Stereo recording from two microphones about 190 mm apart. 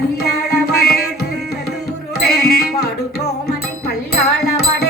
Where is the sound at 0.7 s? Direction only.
55° left (ahead or behind).